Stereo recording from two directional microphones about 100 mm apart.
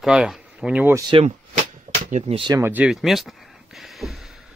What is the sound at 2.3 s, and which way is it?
Speech, 90° right.